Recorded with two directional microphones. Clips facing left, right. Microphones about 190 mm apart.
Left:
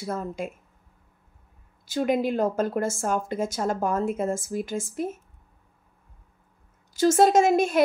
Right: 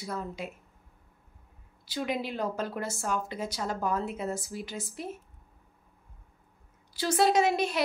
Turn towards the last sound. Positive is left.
turn(degrees=50)  # may be behind; listen again after turning